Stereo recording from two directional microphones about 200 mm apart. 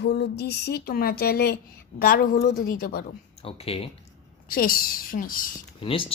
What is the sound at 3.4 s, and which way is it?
Speech, 30° left (ahead or behind).